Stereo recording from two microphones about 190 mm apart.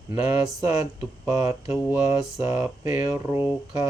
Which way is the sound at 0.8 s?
15° right (ahead or behind).